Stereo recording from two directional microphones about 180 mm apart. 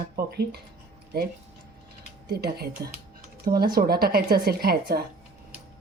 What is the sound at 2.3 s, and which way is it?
Speech, 60° right (ahead or behind).